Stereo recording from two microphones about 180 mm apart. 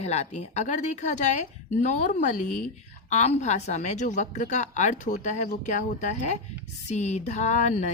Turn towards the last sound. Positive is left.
turn(degrees=40)  # may be behind; listen again after turning